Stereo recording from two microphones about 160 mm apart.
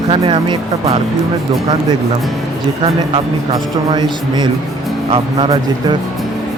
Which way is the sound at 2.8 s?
35° right (ahead or behind).